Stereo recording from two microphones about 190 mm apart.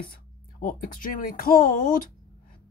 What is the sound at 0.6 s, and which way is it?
Speech, 45° left (ahead or behind).